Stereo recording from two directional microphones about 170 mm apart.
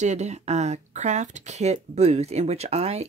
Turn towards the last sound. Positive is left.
turn(degrees=-40)  # may be behind; listen again after turning